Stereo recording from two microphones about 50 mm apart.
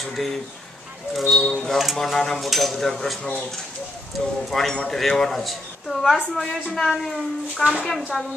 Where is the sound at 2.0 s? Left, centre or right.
Centre.